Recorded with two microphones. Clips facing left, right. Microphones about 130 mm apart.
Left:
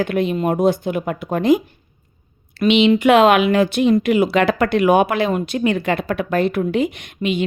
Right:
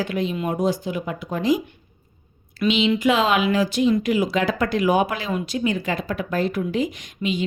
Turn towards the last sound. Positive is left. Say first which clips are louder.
# left 4 dB
turn(degrees=65)  # may be behind; listen again after turning